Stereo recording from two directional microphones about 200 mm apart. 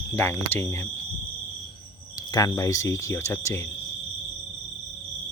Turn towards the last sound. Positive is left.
turn(degrees=10)  # may be behind; listen again after turning